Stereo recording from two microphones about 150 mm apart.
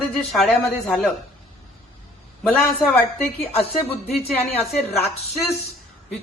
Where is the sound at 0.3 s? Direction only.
Centre (ahead or behind).